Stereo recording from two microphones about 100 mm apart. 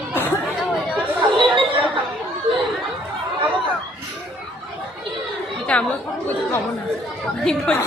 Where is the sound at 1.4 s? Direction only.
55° right (ahead or behind).